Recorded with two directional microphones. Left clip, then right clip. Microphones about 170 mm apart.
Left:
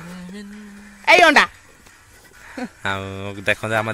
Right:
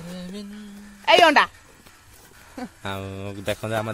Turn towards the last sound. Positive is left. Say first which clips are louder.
# left 6 dB
turn(degrees=-5)  # may be behind; listen again after turning